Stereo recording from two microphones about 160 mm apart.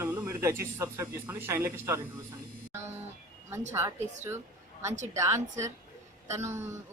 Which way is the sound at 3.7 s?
15° right (ahead or behind).